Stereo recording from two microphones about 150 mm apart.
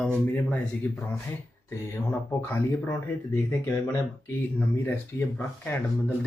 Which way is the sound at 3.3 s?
15° left (ahead or behind).